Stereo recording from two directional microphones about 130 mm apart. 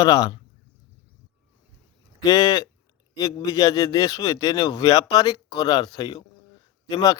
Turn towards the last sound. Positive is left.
turn(degrees=30)  # may be behind; listen again after turning